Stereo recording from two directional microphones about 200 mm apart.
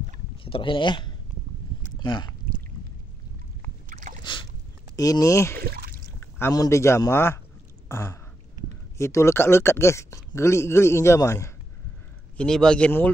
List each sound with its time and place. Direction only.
0.4 s speech: 25° left (ahead or behind)
3.9 s boat: 40° right (ahead or behind)
4.2 s boat: 25° left (ahead or behind)
4.9 s speech: 15° left (ahead or behind)
5.6 s a sound: 50° right (ahead or behind)
6.1 s speech: 10° left (ahead or behind)
12.4 s speech: 5° left (ahead or behind)